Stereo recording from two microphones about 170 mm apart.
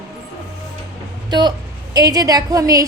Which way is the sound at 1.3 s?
25° right (ahead or behind).